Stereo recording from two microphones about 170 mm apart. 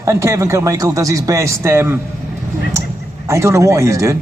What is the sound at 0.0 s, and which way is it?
A man's voice, 15° right (ahead or behind).